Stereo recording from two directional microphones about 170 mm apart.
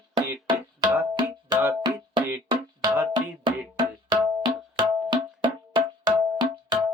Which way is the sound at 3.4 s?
30° right (ahead or behind).